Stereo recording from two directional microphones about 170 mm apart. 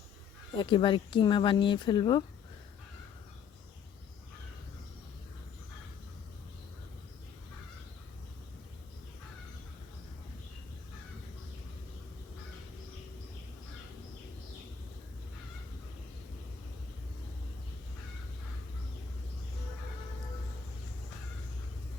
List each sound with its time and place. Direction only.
0.5 s speech: 30° left (ahead or behind)